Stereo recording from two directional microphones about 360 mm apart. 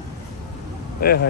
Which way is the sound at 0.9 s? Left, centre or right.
Left.